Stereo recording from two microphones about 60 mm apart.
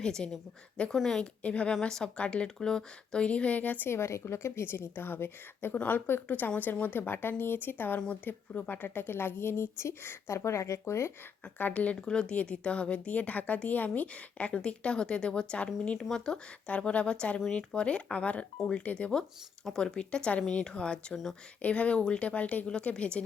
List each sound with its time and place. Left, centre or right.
0.0 s speech: centre
1.4 s speech: left
3.8 s a woman's voice: left
5.7 s a woman's voice: left
11.5 s speech: left
16.0 s speech: centre
19.6 s speech: centre